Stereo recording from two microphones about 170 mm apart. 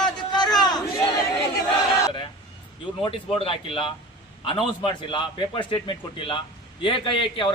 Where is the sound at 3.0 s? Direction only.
30° left (ahead or behind).